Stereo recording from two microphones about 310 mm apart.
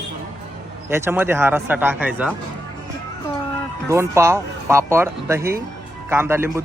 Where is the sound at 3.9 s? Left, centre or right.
Centre.